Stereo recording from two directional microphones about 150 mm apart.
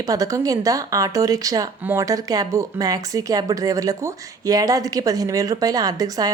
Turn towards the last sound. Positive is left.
turn(degrees=-25)  # may be behind; listen again after turning